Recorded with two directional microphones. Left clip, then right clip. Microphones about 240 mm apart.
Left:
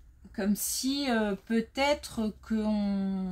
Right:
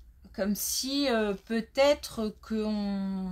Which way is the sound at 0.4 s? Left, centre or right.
Right.